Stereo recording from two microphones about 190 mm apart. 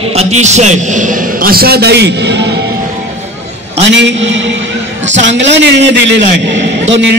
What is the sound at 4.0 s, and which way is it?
Speech, 70° right (ahead or behind).